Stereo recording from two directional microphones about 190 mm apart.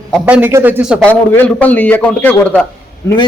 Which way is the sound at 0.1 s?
5° right (ahead or behind).